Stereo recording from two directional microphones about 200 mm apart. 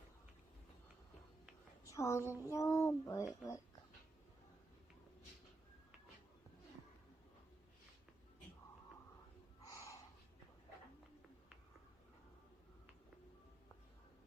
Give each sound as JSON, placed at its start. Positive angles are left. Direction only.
{"t": 1.9, "sound": "child singing", "side_deg": 15}
{"t": 9.6, "sound": "snort", "side_deg": 15}